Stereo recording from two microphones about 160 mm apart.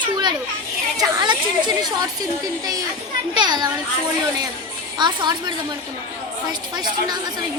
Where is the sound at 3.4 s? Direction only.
25° right (ahead or behind).